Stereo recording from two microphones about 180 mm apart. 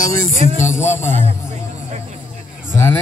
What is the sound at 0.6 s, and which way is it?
Speech, 40° left (ahead or behind).